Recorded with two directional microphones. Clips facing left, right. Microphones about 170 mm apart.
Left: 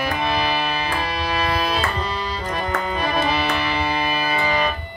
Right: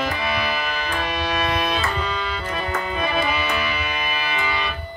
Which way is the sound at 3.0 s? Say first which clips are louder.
Left 2 dB; 35° left (ahead or behind).